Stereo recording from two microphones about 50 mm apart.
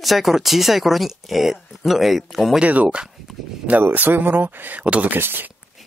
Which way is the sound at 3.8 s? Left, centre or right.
Right.